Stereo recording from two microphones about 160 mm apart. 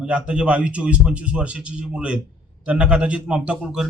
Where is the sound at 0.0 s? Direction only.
5° right (ahead or behind).